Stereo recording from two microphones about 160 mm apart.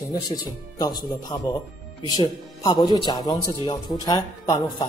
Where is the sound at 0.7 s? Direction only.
25° left (ahead or behind).